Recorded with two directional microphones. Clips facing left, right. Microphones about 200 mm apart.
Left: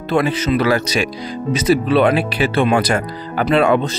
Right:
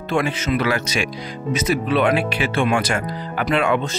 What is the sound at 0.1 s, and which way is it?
Speech, 35° left (ahead or behind).